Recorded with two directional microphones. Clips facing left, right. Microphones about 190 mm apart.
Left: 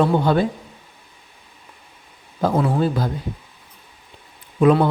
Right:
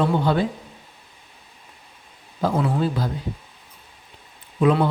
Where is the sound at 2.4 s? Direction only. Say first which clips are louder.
Left 3 dB; 45° left (ahead or behind).